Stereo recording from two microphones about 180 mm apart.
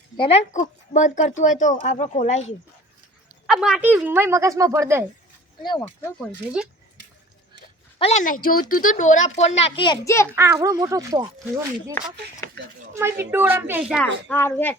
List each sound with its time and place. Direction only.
0.2 s speech: 35° left (ahead or behind)
3.4 s speech: 5° right (ahead or behind)
5.6 s speech: 20° left (ahead or behind)
7.9 s speech: 35° left (ahead or behind)
8.2 s speech: 50° left (ahead or behind); by 10.2 s 15° left (ahead or behind)
10.3 s speech: 15° right (ahead or behind)
12.9 s speech: 15° right (ahead or behind)
14.3 s speech: 10° left (ahead or behind)